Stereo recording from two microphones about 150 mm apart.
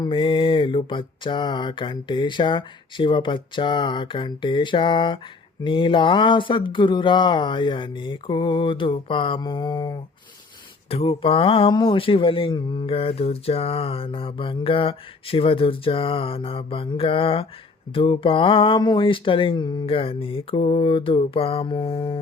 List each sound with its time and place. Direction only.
0.0 s speech: 35° left (ahead or behind)
10.8 s speech: 40° left (ahead or behind)